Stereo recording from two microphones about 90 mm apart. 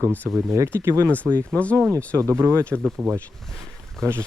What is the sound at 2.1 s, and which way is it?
Speech, 30° right (ahead or behind).